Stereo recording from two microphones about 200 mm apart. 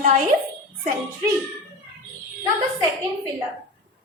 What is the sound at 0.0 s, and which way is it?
Speech, 40° right (ahead or behind).